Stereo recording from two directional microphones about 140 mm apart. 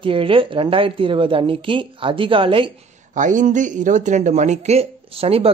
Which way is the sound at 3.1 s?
65° right (ahead or behind).